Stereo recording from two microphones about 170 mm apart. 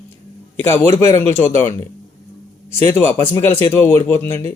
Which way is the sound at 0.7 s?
15° left (ahead or behind).